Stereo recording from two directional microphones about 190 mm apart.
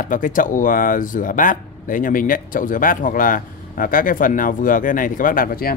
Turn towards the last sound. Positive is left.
turn(degrees=50)  # may be behind; listen again after turning